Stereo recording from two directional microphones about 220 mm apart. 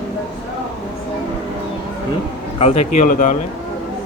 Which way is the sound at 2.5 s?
30° left (ahead or behind).